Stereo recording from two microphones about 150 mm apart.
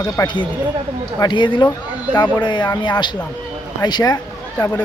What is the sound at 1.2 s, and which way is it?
Music, 30° left (ahead or behind).